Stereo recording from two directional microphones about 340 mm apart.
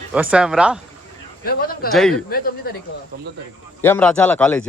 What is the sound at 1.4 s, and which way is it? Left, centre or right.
Speech, left.